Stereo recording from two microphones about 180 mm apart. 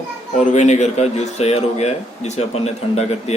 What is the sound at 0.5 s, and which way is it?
A man's voice, 40° left (ahead or behind).